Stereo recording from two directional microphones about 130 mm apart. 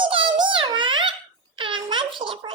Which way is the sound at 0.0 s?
40° right (ahead or behind).